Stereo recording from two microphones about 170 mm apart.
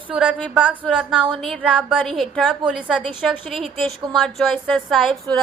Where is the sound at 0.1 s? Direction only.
5° right (ahead or behind).